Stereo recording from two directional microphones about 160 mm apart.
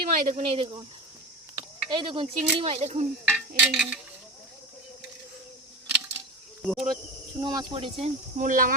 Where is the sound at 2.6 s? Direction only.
40° right (ahead or behind).